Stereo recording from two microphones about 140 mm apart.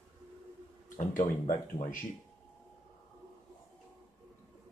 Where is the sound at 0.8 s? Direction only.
65° left (ahead or behind).